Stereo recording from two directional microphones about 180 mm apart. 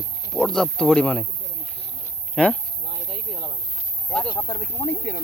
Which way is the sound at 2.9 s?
30° right (ahead or behind).